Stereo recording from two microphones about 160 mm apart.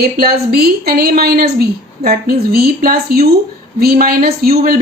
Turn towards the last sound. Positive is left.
turn(degrees=-75)  # may be behind; listen again after turning